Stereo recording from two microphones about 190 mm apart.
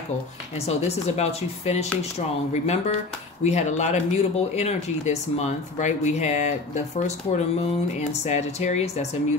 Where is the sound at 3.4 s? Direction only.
35° left (ahead or behind).